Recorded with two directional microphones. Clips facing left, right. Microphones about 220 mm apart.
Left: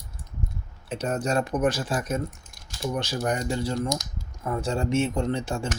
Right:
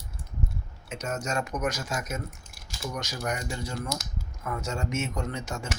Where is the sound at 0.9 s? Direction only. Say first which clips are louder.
Left 6 dB; 35° left (ahead or behind).